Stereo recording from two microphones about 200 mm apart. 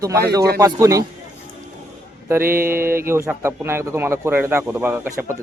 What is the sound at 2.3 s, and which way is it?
A man's voice, 10° right (ahead or behind).